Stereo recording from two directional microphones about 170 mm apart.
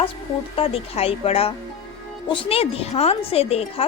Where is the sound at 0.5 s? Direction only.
35° left (ahead or behind).